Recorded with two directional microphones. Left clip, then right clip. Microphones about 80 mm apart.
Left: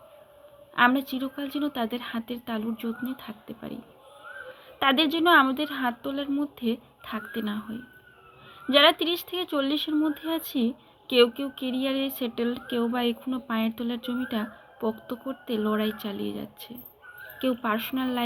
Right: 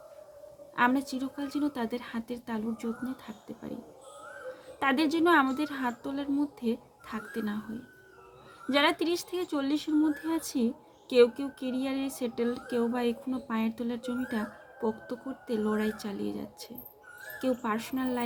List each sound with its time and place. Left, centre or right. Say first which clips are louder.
0.8 s speech: left 5 dB; right
4.8 s speech: left 4 dB; right
8.7 s speech: left 6 dB; right